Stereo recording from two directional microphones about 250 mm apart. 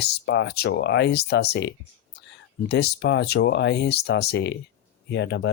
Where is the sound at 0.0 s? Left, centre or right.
Left.